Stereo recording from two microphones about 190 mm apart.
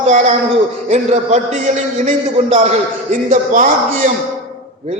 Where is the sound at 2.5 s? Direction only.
35° right (ahead or behind).